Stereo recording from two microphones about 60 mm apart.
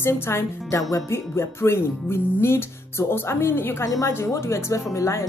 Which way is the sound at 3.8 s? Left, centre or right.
Left.